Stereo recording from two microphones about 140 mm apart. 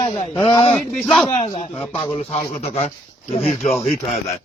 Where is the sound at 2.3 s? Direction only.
45° left (ahead or behind).